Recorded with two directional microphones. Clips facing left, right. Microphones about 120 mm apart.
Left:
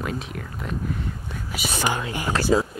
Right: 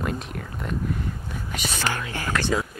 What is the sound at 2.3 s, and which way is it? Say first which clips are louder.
Speech: left 1 dB; 30° left (ahead or behind).